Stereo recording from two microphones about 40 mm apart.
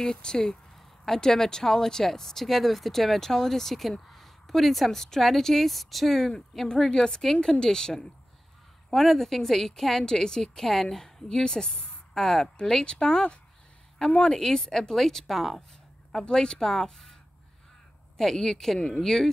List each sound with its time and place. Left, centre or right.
0.0 s a woman's voice: centre
6.7 s speech: centre
8.9 s speech: centre
12.8 s speech: left
14.3 s speech: centre
16.1 s speech: centre